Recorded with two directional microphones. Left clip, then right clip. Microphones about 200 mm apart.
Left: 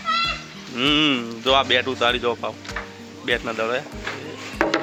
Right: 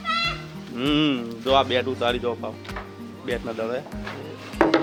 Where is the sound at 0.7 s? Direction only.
15° left (ahead or behind).